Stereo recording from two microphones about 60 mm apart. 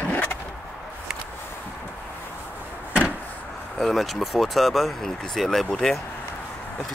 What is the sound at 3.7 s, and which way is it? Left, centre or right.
Speech, centre.